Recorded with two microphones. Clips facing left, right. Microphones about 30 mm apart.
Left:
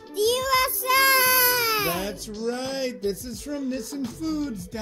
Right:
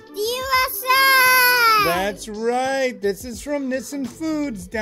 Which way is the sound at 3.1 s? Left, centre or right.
Right.